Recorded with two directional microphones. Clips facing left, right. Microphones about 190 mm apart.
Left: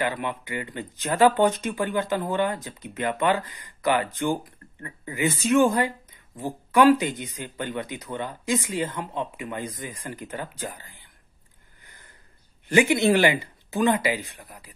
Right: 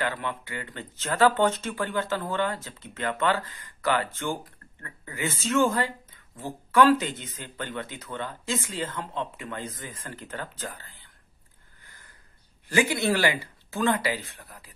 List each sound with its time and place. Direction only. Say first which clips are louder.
0.0 s speech: left 3 dB; 15° left (ahead or behind)
11.8 s a sound: left 2 dB; 20° left (ahead or behind)
12.6 s speech: left 5 dB; 20° left (ahead or behind)